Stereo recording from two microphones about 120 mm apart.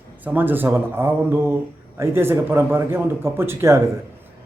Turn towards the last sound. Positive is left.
turn(degrees=-20)  # may be behind; listen again after turning